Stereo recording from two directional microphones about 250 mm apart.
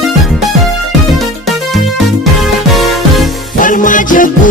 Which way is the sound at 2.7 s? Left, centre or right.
Centre.